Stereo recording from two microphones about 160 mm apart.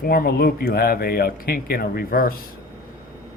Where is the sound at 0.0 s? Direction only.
70° left (ahead or behind).